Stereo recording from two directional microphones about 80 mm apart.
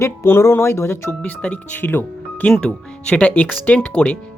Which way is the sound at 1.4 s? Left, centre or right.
Left.